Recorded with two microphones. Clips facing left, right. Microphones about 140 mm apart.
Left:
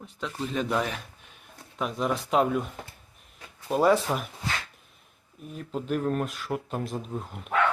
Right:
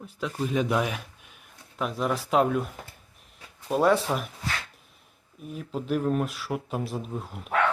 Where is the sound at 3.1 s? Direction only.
Centre (ahead or behind).